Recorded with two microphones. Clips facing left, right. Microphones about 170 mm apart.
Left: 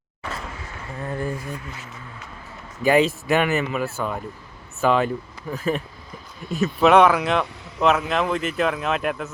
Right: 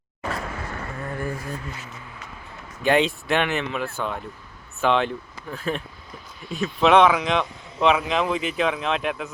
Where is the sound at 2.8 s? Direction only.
5° left (ahead or behind).